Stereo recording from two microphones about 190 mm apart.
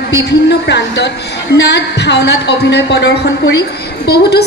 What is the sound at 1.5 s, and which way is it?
A woman's voice, 65° left (ahead or behind).